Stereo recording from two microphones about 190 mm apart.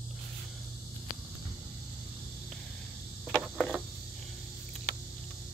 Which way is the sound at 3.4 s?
Centre (ahead or behind).